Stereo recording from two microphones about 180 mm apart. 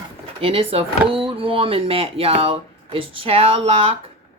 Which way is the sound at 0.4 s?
30° right (ahead or behind).